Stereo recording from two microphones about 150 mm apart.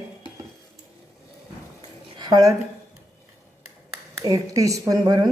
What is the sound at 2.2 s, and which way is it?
Speech, 25° right (ahead or behind).